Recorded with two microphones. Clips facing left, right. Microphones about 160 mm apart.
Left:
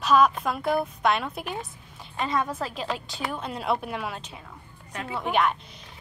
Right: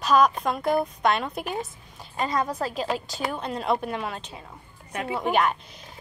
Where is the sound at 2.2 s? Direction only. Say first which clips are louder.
Right 1 dB; 40° right (ahead or behind).